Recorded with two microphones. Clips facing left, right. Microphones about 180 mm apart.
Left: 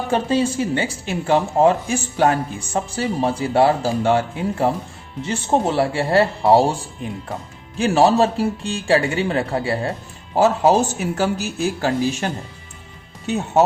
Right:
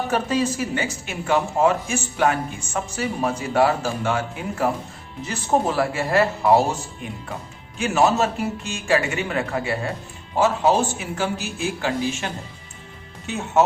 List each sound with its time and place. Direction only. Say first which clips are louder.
0.1 s speech: left 5 dB; 30° left (ahead or behind)